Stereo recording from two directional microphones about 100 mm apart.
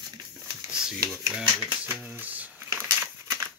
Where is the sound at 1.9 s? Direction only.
15° right (ahead or behind).